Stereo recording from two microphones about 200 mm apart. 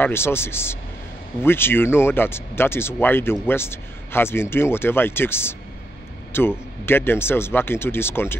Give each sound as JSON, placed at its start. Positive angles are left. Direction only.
{"t": 0.0, "sound": "speech", "side_deg": 10}